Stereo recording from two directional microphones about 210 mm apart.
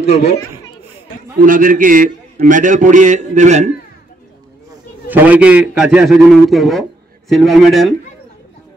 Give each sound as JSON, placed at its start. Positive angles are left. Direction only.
{"t": 0.0, "sound": "speech", "side_deg": 30}
{"t": 1.4, "sound": "a man's voice", "side_deg": -40}
{"t": 5.0, "sound": "a man's voice", "side_deg": -10}